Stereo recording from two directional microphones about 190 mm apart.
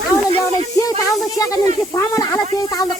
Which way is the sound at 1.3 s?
15° left (ahead or behind).